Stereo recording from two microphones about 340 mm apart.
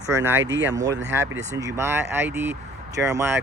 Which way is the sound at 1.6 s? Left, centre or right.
Centre.